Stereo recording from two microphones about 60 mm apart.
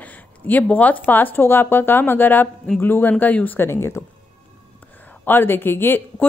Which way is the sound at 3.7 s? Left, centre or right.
Left.